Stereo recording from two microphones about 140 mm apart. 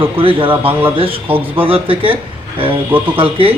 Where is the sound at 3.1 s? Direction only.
40° right (ahead or behind).